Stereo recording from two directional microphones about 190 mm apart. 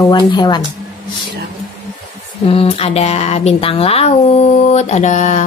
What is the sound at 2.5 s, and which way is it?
Speech, 30° left (ahead or behind).